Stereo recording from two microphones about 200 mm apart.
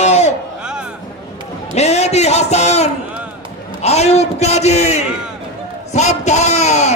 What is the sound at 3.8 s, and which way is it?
A man's voice, 35° left (ahead or behind).